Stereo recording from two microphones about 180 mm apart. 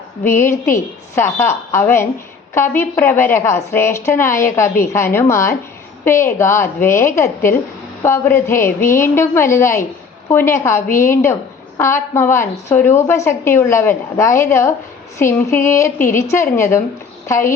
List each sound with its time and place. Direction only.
0.3 s a woman's voice: 15° left (ahead or behind)